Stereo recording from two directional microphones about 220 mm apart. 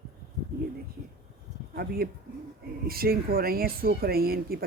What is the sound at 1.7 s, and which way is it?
Speech, 45° right (ahead or behind).